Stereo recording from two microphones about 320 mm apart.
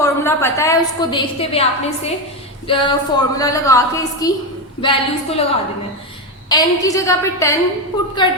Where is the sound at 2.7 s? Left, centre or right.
Centre.